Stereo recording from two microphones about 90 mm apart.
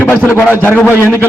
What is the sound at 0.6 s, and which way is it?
Speech, 15° left (ahead or behind).